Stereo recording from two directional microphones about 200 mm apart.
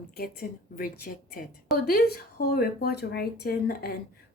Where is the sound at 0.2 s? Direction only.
45° left (ahead or behind).